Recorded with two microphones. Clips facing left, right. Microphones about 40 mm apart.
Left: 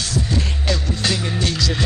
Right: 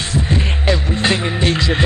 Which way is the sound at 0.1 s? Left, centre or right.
Right.